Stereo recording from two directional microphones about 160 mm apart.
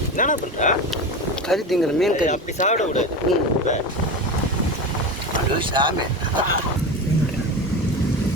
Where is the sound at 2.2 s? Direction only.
50° left (ahead or behind).